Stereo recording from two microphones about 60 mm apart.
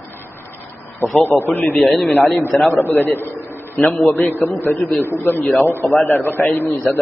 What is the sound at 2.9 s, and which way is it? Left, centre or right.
A man's voice, left.